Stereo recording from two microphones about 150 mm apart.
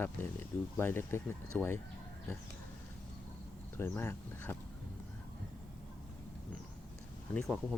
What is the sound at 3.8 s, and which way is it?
Speech, 15° left (ahead or behind).